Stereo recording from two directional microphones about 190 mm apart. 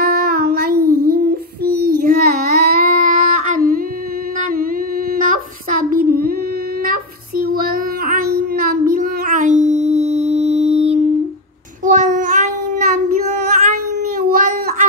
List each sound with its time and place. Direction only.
0.0 s child singing: 50° right (ahead or behind)
2.6 s a sound: 45° right (ahead or behind)
5.1 s child singing: 45° right (ahead or behind)